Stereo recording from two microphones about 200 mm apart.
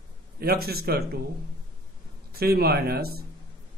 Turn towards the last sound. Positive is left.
turn(degrees=-50)  # may be behind; listen again after turning